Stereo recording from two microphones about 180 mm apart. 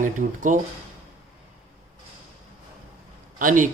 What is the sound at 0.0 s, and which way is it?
Speech, 45° right (ahead or behind).